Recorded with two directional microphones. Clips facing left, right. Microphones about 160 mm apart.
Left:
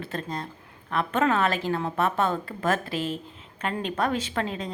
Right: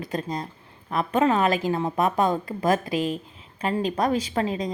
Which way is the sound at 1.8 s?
40° right (ahead or behind).